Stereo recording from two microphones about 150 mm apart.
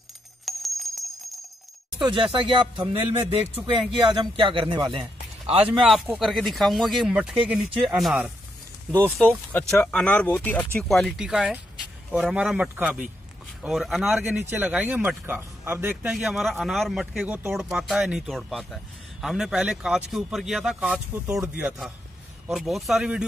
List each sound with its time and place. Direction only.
0.5 s bell: centre (ahead or behind)
2.0 s speech: 35° right (ahead or behind)
5.7 s speech: 5° right (ahead or behind)
9.5 s speech: 10° left (ahead or behind); by 23.2 s 5° right (ahead or behind)